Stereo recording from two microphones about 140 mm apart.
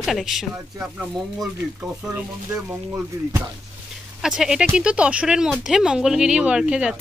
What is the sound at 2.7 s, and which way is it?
Speech, 20° right (ahead or behind).